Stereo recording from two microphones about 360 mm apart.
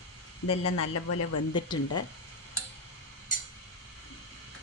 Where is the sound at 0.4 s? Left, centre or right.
Left.